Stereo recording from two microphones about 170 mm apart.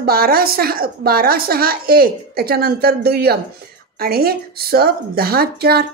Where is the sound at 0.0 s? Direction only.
60° right (ahead or behind).